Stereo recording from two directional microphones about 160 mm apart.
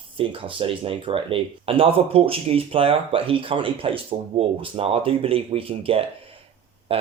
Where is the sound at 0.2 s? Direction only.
35° right (ahead or behind).